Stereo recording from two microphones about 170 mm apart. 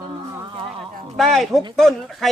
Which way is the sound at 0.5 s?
30° right (ahead or behind).